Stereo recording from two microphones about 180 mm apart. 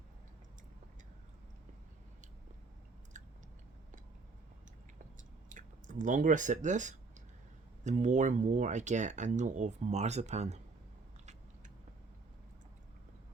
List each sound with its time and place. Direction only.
5.5 s speech: 45° right (ahead or behind)